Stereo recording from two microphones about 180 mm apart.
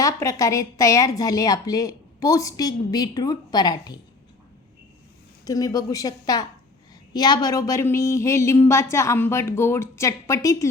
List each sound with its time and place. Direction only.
0.0 s a woman's voice: 15° left (ahead or behind)
5.5 s a woman's voice: 20° left (ahead or behind)